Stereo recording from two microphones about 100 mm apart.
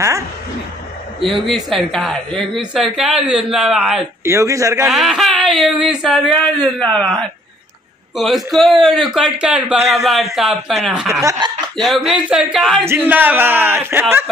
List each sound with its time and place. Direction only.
1.2 s a man's voice: centre (ahead or behind)
4.2 s a man's voice: 25° right (ahead or behind)
4.8 s a man's voice: centre (ahead or behind)
8.2 s a man's voice: centre (ahead or behind)
11.3 s chuckle: 50° right (ahead or behind)
12.1 s a man's voice: 10° right (ahead or behind)
12.8 s a man's voice: 20° right (ahead or behind)